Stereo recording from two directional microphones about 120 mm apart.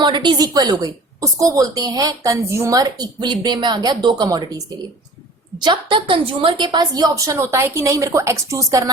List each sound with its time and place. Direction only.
0.0 s a woman's voice: 40° right (ahead or behind)